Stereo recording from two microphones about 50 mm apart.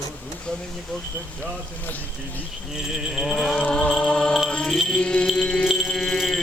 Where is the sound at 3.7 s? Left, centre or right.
Centre.